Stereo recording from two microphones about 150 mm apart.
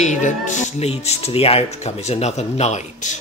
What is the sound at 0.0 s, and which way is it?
Speech, 55° left (ahead or behind).